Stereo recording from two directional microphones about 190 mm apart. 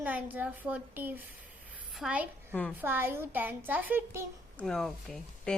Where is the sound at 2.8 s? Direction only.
10° right (ahead or behind).